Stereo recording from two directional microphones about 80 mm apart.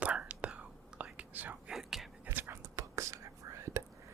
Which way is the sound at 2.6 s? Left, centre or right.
Right.